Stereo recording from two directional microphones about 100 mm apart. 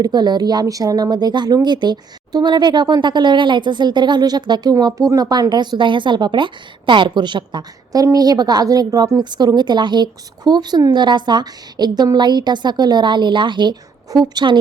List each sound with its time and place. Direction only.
0.0 s a woman's voice: 45° right (ahead or behind)